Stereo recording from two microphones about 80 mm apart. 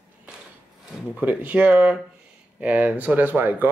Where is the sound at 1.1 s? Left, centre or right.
Right.